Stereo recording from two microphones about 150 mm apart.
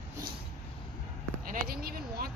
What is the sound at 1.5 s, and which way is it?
Speech, 75° right (ahead or behind).